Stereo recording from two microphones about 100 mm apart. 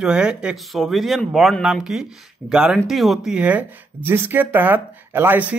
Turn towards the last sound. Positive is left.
turn(degrees=-15)  # may be behind; listen again after turning